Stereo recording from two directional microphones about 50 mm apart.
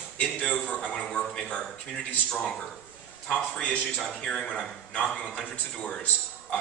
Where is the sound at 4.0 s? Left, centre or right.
Centre.